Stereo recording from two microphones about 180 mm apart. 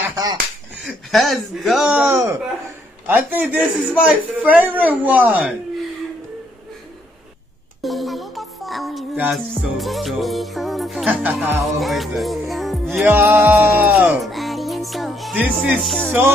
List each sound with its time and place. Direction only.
0.0 s finger snapping: 20° right (ahead or behind)
0.8 s music: centre (ahead or behind)
3.1 s a man's voice: 10° right (ahead or behind)
7.8 s music: centre (ahead or behind)
13.1 s music: 10° right (ahead or behind)